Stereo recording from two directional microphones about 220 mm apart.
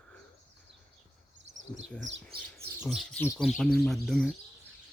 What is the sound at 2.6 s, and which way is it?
Speech, 5° right (ahead or behind).